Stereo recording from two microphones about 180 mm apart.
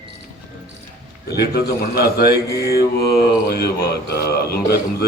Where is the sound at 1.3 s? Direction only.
65° left (ahead or behind).